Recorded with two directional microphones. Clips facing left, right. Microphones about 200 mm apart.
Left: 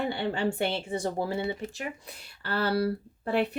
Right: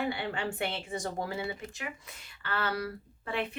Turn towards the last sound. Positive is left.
turn(degrees=35)  # may be behind; listen again after turning